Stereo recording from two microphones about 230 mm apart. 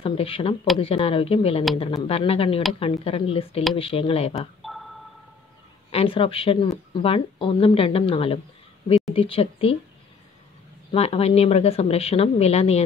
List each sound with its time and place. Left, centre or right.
0.0 s speech: left
4.6 s a sound: centre
5.9 s speech: left
10.9 s speech: left